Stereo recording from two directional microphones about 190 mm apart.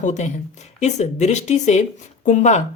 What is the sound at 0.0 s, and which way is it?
Speech, 40° left (ahead or behind).